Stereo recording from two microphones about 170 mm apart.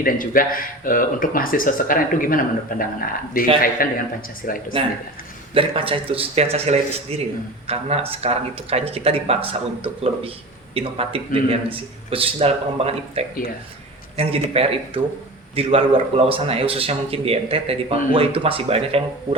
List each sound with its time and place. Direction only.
0.0 s speech: 55° left (ahead or behind)
5.5 s speech: 30° right (ahead or behind)